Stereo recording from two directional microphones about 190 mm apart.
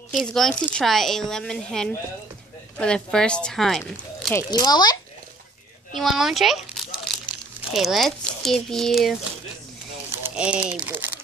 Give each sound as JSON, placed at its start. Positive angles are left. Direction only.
{"t": 0.1, "sound": "speech", "side_deg": 0}
{"t": 4.3, "sound": "speech", "side_deg": 15}
{"t": 5.9, "sound": "a child's voice", "side_deg": 0}
{"t": 10.2, "sound": "speech", "side_deg": -5}